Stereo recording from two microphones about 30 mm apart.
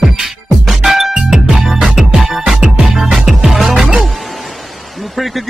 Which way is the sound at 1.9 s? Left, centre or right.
Right.